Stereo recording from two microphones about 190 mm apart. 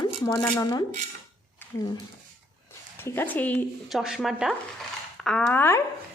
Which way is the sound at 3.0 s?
10° left (ahead or behind).